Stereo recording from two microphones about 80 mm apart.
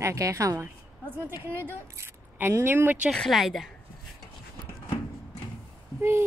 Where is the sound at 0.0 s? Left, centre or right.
Right.